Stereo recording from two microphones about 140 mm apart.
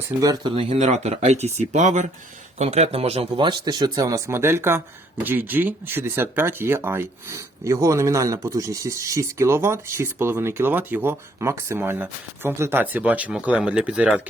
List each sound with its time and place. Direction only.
0.2 s speech: 25° right (ahead or behind)
0.5 s a man's voice: 40° right (ahead or behind); by 14.2 s 10° right (ahead or behind)